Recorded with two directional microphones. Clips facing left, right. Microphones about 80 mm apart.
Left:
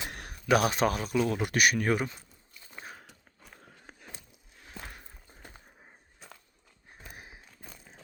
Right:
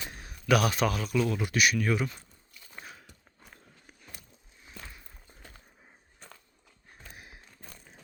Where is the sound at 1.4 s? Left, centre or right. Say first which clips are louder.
Left 1 dB; left.